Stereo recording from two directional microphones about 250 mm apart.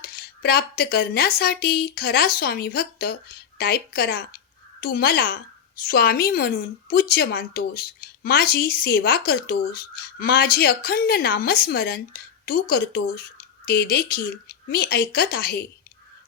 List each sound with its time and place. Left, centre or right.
0.1 s a woman's voice: left